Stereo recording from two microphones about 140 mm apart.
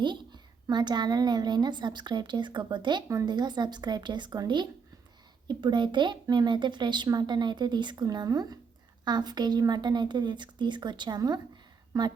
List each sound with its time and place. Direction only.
0.0 s a child's voice: 30° right (ahead or behind)